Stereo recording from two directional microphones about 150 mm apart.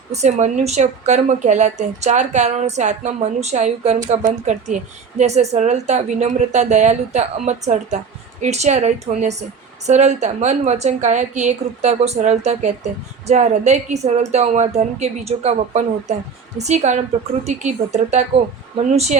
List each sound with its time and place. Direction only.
0.1 s speech: 50° right (ahead or behind)